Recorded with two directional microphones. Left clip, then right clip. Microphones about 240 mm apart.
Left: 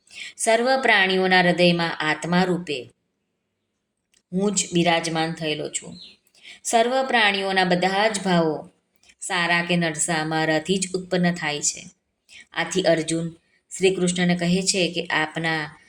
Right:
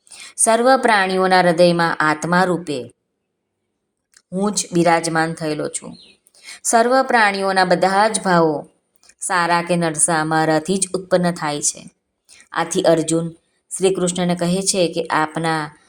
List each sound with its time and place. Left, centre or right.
0.1 s speech: right
4.3 s speech: centre
13.7 s a sound: centre
14.0 s speech: centre